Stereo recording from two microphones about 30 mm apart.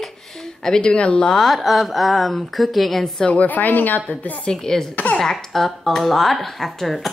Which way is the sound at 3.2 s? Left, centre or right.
Left.